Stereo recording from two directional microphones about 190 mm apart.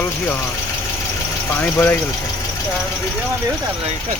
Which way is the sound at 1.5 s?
10° left (ahead or behind).